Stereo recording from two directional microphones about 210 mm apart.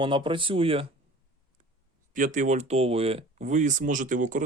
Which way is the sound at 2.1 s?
40° right (ahead or behind).